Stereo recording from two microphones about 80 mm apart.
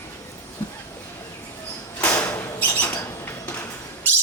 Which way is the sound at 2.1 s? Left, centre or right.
Left.